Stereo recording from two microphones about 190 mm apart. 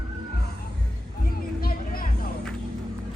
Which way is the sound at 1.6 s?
50° left (ahead or behind).